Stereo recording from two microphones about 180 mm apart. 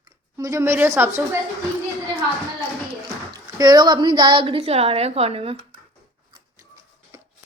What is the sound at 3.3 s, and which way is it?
A woman's voice, 20° right (ahead or behind).